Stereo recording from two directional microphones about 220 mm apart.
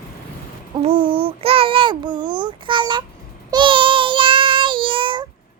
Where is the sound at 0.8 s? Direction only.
25° right (ahead or behind).